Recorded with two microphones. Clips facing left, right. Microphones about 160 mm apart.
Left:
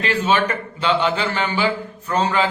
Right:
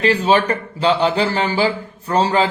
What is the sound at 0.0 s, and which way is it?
A man's voice, 35° right (ahead or behind).